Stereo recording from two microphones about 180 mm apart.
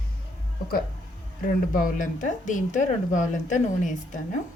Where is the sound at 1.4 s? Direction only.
50° left (ahead or behind).